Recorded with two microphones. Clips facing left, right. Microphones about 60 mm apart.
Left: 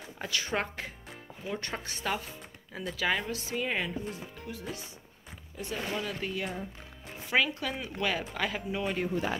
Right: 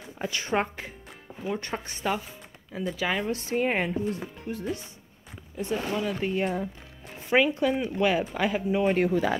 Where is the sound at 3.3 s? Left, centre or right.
Right.